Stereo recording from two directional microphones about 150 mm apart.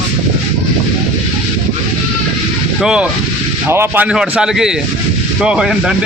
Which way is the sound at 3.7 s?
15° right (ahead or behind).